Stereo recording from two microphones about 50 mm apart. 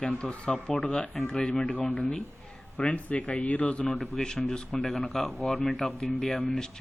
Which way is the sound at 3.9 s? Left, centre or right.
Centre.